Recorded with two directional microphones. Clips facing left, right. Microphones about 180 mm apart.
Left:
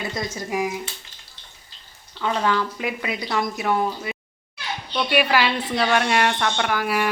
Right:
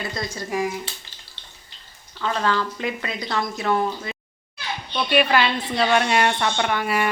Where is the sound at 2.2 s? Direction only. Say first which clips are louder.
Left 1 dB; 15° left (ahead or behind).